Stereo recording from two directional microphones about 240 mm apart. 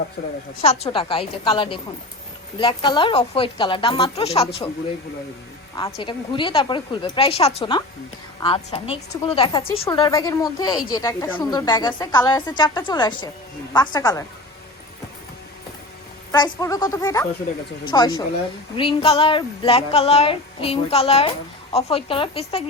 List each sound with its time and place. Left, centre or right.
0.9 s speech: left
5.7 s a woman's voice: centre
16.3 s a woman's voice: centre